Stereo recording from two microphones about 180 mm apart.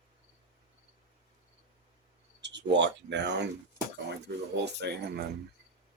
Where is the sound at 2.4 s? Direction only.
75° right (ahead or behind).